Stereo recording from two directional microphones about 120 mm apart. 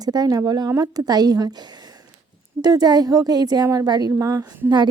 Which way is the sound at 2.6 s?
35° right (ahead or behind).